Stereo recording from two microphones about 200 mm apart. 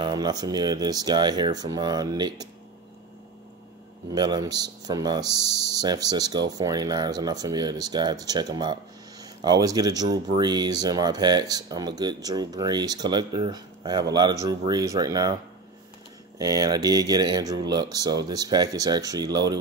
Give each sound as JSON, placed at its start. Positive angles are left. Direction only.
{"t": 0.0, "sound": "speech", "side_deg": -20}
{"t": 4.1, "sound": "speech", "side_deg": -20}
{"t": 16.3, "sound": "speech", "side_deg": -20}